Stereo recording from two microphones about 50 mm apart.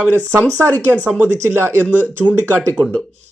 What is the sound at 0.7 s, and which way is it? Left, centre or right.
Speech, left.